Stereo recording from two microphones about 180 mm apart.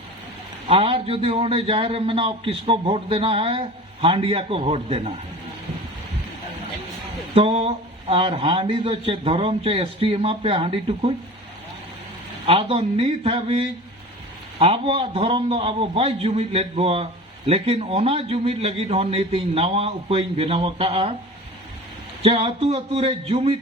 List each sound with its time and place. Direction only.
0.7 s a man's voice: 30° right (ahead or behind)
7.3 s a man's voice: 30° right (ahead or behind)
12.5 s a man's voice: 30° right (ahead or behind)
22.2 s a man's voice: 35° right (ahead or behind)